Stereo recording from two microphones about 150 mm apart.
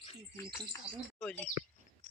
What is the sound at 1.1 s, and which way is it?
Speech, 10° left (ahead or behind).